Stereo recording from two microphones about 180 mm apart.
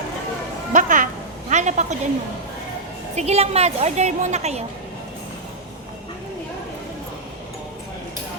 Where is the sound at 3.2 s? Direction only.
35° right (ahead or behind).